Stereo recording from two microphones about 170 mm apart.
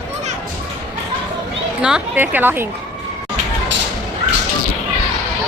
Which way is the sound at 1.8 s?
5° right (ahead or behind).